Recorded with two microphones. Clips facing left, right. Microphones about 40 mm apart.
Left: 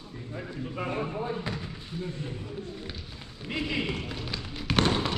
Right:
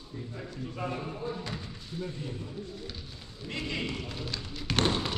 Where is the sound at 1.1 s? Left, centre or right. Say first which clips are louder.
Left 4 dB; left.